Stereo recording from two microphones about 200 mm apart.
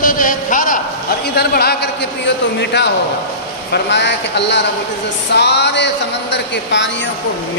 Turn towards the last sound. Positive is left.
turn(degrees=60)  # may be behind; listen again after turning